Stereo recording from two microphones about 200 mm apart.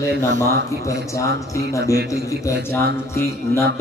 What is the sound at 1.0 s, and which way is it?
A man's voice, 15° left (ahead or behind).